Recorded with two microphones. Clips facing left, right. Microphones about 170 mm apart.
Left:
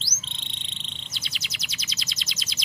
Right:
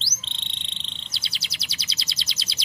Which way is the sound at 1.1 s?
30° right (ahead or behind).